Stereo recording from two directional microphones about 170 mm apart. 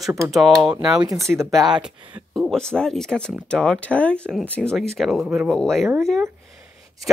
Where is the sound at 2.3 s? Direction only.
Centre (ahead or behind).